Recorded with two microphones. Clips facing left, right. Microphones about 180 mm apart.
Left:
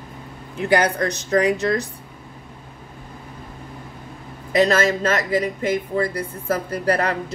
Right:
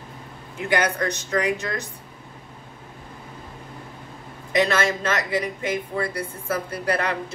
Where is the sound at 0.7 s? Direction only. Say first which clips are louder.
Left 4 dB; 35° left (ahead or behind).